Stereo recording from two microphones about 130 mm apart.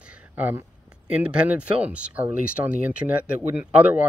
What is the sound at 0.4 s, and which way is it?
Speech, 15° right (ahead or behind).